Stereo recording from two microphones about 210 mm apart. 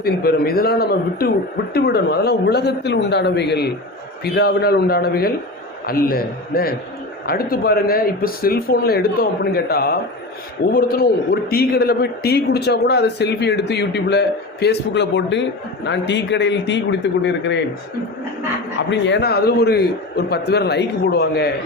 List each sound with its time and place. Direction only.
0.0 s speech: 45° left (ahead or behind)
18.8 s speech: 60° left (ahead or behind)